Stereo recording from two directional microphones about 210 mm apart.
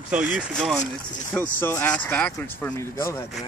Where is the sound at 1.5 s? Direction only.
10° left (ahead or behind).